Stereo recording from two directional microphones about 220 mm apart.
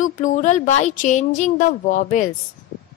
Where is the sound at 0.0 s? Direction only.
35° left (ahead or behind).